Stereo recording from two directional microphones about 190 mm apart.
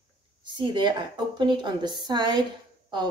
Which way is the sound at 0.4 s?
25° right (ahead or behind).